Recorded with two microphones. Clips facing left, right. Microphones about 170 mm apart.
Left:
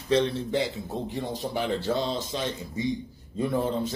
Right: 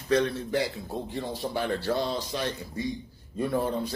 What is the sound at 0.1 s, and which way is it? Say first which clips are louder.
A man's voice: left 1 dB; 25° left (ahead or behind).